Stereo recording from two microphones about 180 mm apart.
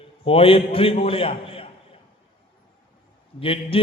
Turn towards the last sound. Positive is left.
turn(degrees=30)  # may be behind; listen again after turning